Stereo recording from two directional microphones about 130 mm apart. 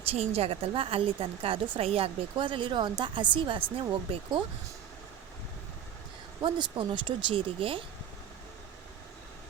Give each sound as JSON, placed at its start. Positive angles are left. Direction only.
{"t": 0.0, "sound": "a woman's voice", "side_deg": -50}
{"t": 6.4, "sound": "speech", "side_deg": -40}